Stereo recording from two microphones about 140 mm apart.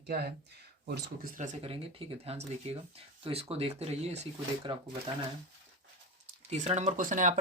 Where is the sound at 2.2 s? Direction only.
45° right (ahead or behind).